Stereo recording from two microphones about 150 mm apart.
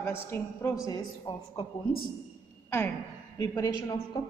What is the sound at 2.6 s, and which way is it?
A woman's voice, 15° left (ahead or behind).